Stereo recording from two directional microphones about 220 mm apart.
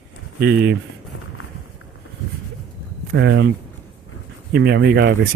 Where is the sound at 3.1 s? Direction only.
55° right (ahead or behind).